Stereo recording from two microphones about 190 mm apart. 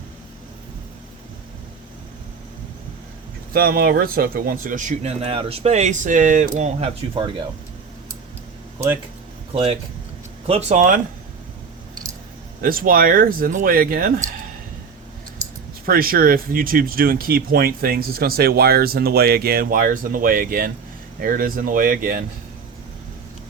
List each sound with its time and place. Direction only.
3.5 s speech: 50° right (ahead or behind); by 7.4 s 25° right (ahead or behind)
9.5 s speech: 30° right (ahead or behind)
12.6 s speech: 50° right (ahead or behind)
15.9 s speech: 50° right (ahead or behind)